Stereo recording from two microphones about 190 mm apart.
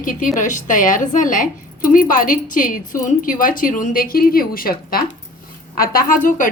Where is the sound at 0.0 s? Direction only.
45° left (ahead or behind).